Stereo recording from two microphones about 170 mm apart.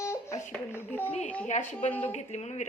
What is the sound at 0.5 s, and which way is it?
Speech, 10° left (ahead or behind).